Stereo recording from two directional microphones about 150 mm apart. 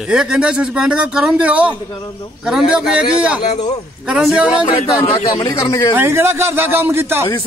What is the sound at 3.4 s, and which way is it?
Speech, 50° left (ahead or behind).